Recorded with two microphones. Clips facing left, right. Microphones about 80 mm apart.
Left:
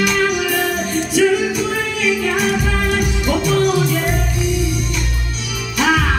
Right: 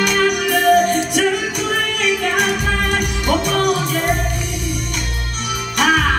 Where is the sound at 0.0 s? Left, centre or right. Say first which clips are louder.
Even; right.